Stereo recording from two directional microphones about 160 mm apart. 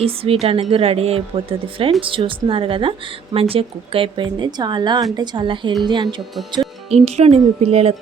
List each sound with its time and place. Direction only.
0.0 s speech: 35° right (ahead or behind)
6.9 s speech: 40° right (ahead or behind)